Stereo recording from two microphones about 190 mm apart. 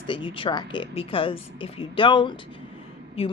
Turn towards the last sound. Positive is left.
turn(degrees=30)  # may be behind; listen again after turning